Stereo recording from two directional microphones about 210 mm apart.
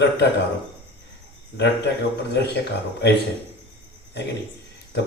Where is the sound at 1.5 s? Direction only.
55° left (ahead or behind).